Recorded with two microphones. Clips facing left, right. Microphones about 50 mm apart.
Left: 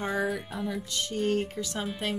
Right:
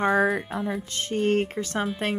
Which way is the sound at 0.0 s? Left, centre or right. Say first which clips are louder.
Right 8 dB; right.